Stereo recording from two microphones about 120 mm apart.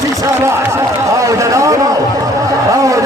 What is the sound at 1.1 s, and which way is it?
Run, 25° right (ahead or behind).